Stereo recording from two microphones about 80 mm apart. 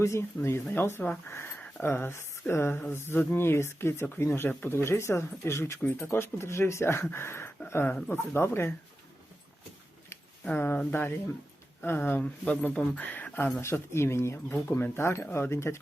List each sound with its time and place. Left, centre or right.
0.0 s speech: left
10.5 s speech: left
12.2 s speech: centre; by 15.8 s left